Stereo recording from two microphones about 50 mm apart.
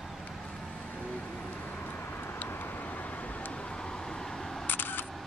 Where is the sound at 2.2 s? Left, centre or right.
Left.